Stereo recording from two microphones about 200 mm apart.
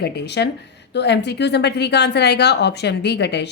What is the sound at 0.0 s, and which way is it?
A woman's voice, 55° left (ahead or behind).